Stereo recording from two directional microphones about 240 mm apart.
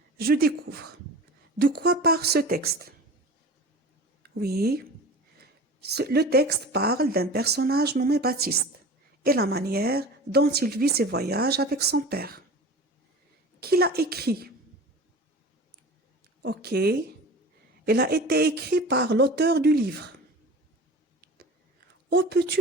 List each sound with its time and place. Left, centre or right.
0.2 s a woman's voice: right
4.2 s speech: right
5.8 s a woman's voice: right
13.6 s a woman's voice: right
16.4 s a woman's voice: right
22.1 s speech: right